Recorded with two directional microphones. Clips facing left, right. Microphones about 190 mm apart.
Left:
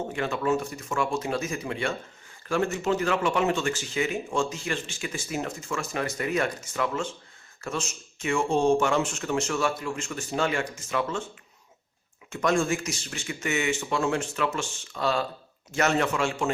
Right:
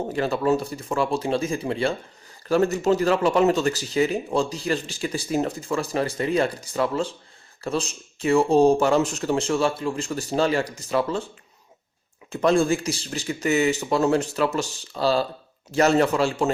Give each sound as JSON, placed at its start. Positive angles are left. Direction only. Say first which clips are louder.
{"t": 0.1, "sound": "speech", "louder": "right 5 dB", "side_deg": -35}
{"t": 12.3, "sound": "speech", "louder": "right 5 dB", "side_deg": -30}